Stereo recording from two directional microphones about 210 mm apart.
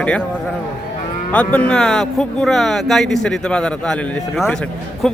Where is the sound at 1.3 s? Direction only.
5° left (ahead or behind).